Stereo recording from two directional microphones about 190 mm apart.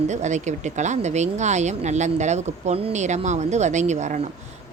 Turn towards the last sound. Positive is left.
turn(degrees=-40)  # may be behind; listen again after turning